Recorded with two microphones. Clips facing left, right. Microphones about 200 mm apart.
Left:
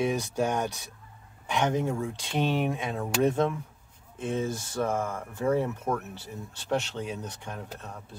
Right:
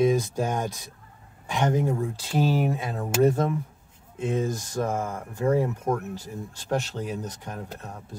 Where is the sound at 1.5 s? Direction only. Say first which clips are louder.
Right 2 dB; 10° right (ahead or behind).